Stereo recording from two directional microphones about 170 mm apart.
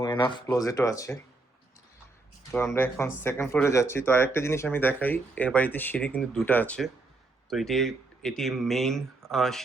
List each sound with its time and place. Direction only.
0.0 s a sound: 25° left (ahead or behind)
0.4 s speech: 20° left (ahead or behind)
2.7 s speech: 15° left (ahead or behind)